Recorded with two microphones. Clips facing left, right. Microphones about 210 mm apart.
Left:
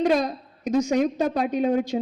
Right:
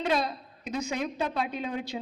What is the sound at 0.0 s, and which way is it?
A woman's voice, 45° left (ahead or behind).